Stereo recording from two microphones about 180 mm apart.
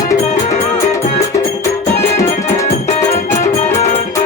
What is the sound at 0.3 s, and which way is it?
Music, 40° left (ahead or behind).